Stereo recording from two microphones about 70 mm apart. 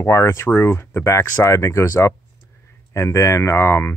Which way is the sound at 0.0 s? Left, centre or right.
Left.